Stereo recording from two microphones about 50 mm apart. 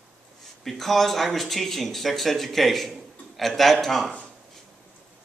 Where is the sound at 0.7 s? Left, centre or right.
Centre.